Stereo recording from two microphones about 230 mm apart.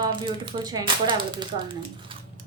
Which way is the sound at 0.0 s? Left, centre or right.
Right.